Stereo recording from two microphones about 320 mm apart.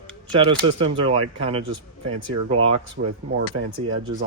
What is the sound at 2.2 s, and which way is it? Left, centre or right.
Speech, right.